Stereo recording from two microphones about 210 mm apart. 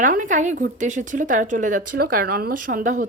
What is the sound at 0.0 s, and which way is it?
Speech, 40° right (ahead or behind).